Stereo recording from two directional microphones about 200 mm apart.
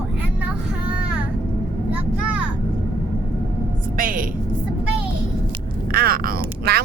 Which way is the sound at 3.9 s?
45° right (ahead or behind).